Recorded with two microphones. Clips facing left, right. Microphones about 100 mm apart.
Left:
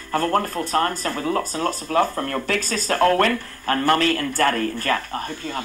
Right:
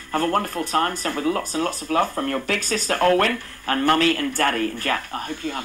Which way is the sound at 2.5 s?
60° right (ahead or behind).